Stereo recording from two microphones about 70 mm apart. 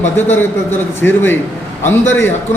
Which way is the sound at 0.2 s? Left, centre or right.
Left.